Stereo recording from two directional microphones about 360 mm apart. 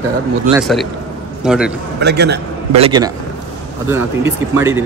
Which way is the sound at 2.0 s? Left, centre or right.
Right.